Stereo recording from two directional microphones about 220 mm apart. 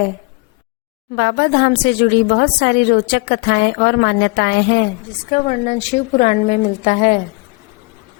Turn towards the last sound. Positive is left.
turn(degrees=35)  # may be behind; listen again after turning